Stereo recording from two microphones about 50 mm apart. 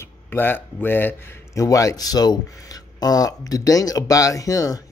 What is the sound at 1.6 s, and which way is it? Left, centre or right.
Speech, left.